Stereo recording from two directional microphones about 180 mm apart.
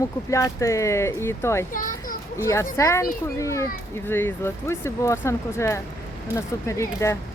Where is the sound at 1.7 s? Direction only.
50° left (ahead or behind).